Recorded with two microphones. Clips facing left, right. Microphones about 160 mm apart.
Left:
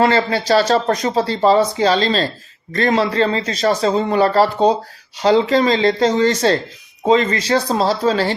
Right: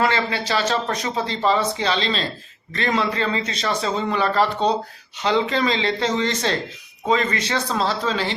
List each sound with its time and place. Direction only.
0.0 s speech: 35° left (ahead or behind)